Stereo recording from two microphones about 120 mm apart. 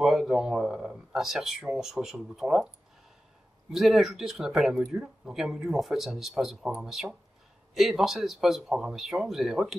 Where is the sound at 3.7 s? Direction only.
Centre (ahead or behind).